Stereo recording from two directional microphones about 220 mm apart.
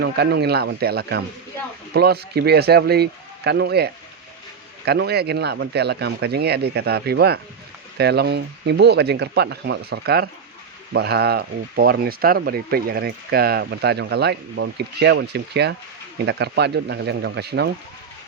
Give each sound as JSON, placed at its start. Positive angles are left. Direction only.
{"t": 0.0, "sound": "speech", "side_deg": -50}